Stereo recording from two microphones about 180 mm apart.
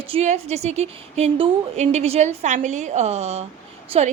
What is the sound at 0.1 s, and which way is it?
A woman's voice, 35° right (ahead or behind).